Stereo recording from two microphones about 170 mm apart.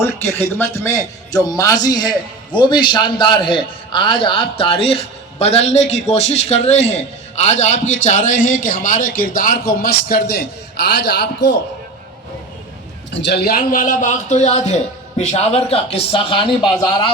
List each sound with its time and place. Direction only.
0.0 s a man's voice: 15° left (ahead or behind); by 11.5 s 85° left
13.1 s a man's voice: 90° left; by 16.7 s 30° left (ahead or behind)